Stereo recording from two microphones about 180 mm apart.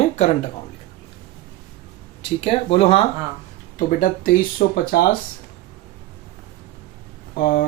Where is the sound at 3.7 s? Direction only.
45° left (ahead or behind).